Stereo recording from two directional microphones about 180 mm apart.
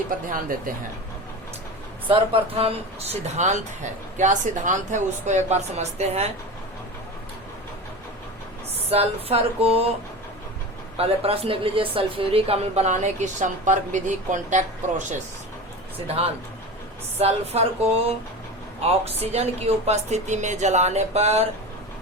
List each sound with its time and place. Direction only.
2.0 s a woman's voice: 30° right (ahead or behind)
8.9 s a woman's voice: 35° right (ahead or behind)
10.9 s a woman's voice: 35° right (ahead or behind)
17.2 s a woman's voice: 35° right (ahead or behind)